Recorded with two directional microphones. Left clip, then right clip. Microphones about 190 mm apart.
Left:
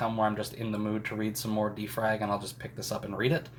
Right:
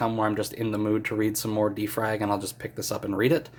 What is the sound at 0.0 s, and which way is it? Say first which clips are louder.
Speech: right 3 dB; 50° right (ahead or behind).